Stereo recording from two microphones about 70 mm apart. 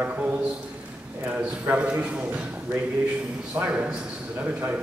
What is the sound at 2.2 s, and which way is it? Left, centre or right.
A man's voice, right.